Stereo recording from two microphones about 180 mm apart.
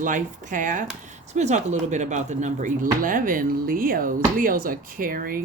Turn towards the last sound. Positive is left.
turn(degrees=-55)  # may be behind; listen again after turning